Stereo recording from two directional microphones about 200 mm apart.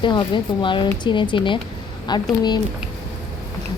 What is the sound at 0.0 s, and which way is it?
A woman's voice, 20° left (ahead or behind).